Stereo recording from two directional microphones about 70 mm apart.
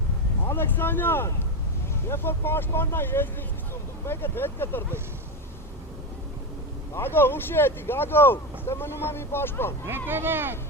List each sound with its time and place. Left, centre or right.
0.4 s speech: left
6.9 s speech: left
10.1 s speech: right